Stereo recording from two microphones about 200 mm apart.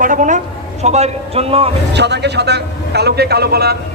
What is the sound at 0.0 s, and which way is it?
A man's voice, 40° right (ahead or behind).